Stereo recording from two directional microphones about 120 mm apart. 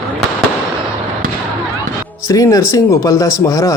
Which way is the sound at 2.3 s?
30° left (ahead or behind).